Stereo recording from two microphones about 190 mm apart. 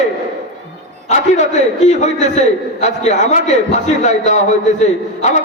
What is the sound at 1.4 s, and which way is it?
A man's voice, 40° left (ahead or behind).